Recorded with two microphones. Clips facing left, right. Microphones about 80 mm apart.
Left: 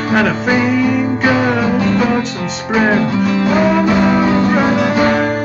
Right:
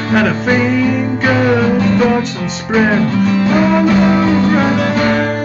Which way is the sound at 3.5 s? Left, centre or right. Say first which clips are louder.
Even; centre.